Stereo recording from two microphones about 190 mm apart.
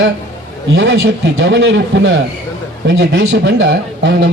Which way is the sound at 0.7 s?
85° right.